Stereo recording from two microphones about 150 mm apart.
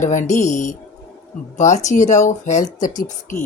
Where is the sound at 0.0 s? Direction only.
55° left (ahead or behind).